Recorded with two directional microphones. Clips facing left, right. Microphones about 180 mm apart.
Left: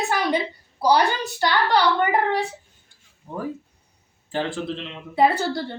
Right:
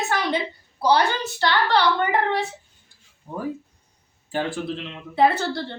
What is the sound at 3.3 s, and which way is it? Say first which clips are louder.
Speech: right 1 dB; 10° right (ahead or behind).